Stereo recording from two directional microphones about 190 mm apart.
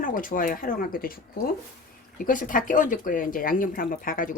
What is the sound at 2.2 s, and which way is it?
A woman's voice, 45° left (ahead or behind).